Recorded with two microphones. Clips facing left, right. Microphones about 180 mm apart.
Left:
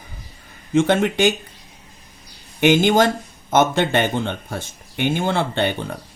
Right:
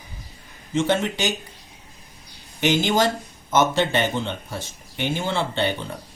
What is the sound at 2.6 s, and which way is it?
Speech, 55° left (ahead or behind).